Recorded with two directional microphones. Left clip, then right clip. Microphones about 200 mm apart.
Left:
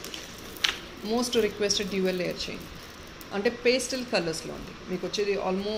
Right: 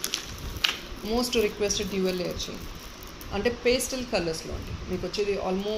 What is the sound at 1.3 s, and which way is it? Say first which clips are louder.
A woman's voice: left 1 dB; 10° left (ahead or behind).